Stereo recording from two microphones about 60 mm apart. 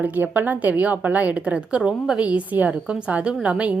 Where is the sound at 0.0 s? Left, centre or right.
Right.